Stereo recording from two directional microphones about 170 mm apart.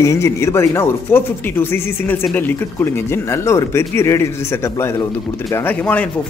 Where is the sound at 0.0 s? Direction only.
15° left (ahead or behind).